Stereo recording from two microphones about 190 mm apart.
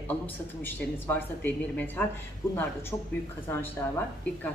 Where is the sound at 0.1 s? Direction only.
10° left (ahead or behind).